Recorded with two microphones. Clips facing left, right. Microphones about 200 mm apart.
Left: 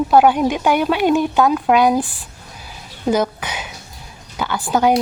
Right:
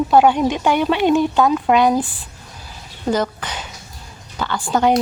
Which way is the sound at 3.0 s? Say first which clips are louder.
Left 2 dB; 10° left (ahead or behind).